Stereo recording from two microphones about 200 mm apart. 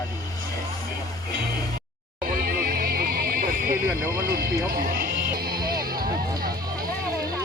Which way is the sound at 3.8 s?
10° right (ahead or behind).